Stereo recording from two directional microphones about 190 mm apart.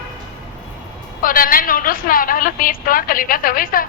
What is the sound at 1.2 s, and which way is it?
A woman's voice, 45° left (ahead or behind).